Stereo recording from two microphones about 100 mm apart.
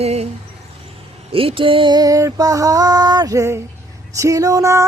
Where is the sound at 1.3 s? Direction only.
65° right (ahead or behind); by 4.8 s 35° right (ahead or behind).